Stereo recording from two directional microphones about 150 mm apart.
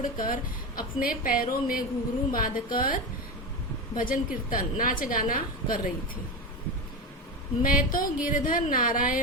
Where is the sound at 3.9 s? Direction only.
65° left (ahead or behind).